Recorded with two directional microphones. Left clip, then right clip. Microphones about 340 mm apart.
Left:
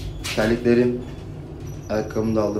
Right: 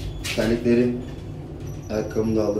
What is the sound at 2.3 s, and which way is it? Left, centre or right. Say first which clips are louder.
Speech: left 1 dB; centre.